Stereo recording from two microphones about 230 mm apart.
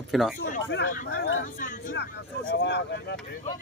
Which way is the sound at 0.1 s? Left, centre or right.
Centre.